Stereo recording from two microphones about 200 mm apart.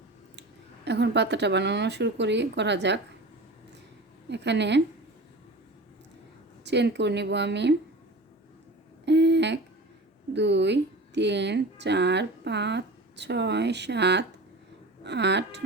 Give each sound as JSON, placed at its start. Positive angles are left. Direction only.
{"t": 0.9, "sound": "speech", "side_deg": -60}
{"t": 4.3, "sound": "speech", "side_deg": -60}
{"t": 6.7, "sound": "speech", "side_deg": -60}
{"t": 9.0, "sound": "a sound", "side_deg": -60}
{"t": 10.3, "sound": "speech", "side_deg": -60}